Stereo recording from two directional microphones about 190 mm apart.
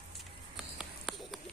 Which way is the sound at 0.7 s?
Centre (ahead or behind).